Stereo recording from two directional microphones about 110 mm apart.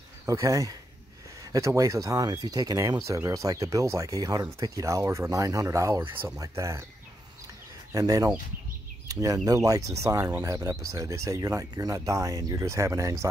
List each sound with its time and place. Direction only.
0.3 s speech: 30° right (ahead or behind)
7.9 s speech: 30° right (ahead or behind)